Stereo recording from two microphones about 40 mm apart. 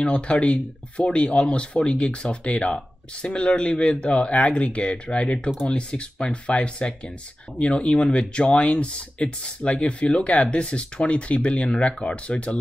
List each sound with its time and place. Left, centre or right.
0.0 s speech: left